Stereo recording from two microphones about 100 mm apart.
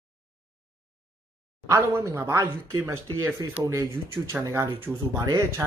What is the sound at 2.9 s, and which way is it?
Speech, 20° right (ahead or behind).